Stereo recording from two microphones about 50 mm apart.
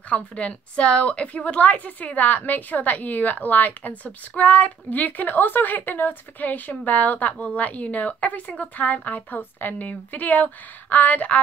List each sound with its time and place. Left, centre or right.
0.1 s a woman's voice: left